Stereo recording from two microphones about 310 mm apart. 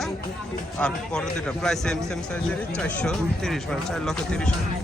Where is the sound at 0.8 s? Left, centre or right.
Centre.